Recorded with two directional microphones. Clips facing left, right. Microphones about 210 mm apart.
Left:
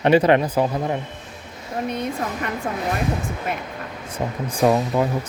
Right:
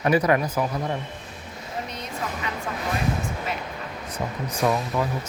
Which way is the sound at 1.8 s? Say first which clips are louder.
Left 7 dB; 55° left (ahead or behind).